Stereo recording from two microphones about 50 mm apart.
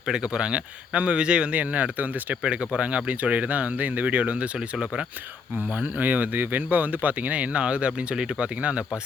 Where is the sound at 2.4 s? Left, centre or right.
Right.